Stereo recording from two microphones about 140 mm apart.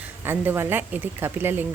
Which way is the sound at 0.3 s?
15° right (ahead or behind).